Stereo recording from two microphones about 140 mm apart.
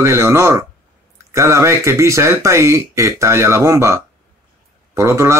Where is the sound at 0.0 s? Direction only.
20° right (ahead or behind).